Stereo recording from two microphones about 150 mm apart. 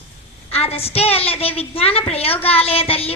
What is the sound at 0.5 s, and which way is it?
A woman's voice, 40° left (ahead or behind).